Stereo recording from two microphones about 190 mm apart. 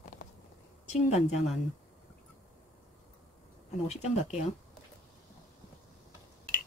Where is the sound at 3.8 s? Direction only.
35° left (ahead or behind).